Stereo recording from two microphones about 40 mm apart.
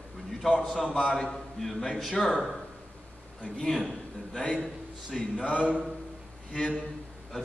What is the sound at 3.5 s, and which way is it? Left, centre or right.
A man's voice, centre.